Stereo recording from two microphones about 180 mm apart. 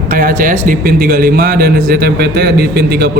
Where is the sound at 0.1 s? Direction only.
55° right (ahead or behind).